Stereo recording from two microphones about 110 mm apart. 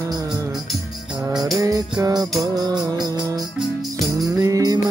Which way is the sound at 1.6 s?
35° right (ahead or behind).